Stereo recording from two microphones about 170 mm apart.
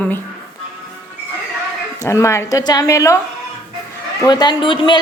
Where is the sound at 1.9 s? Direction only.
15° left (ahead or behind).